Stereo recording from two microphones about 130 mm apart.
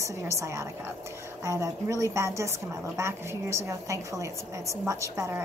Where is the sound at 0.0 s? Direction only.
25° right (ahead or behind).